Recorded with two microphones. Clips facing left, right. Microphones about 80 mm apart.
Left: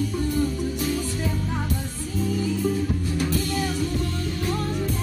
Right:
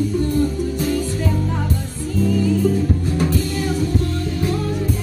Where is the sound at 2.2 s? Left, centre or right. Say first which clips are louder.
Right 7 dB; right.